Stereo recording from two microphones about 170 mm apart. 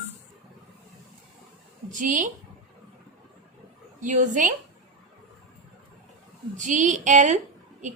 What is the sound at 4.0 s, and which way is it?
Speech, 45° right (ahead or behind).